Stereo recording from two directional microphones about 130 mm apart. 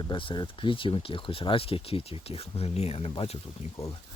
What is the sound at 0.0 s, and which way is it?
Speech, 40° left (ahead or behind).